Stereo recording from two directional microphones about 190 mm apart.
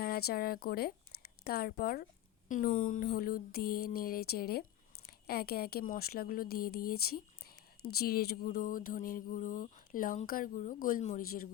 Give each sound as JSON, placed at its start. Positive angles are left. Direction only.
{"t": 0.0, "sound": "a woman's voice", "side_deg": 55}